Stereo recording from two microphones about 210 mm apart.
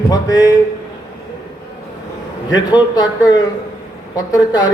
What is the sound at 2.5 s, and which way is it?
A man's voice, 20° left (ahead or behind).